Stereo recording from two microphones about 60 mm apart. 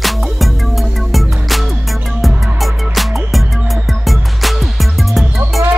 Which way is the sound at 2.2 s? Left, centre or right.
Centre.